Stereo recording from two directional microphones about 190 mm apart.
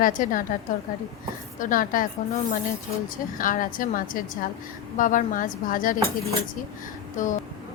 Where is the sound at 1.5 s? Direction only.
45° left (ahead or behind).